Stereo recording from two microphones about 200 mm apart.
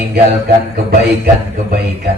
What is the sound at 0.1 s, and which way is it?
A man's voice, 50° right (ahead or behind).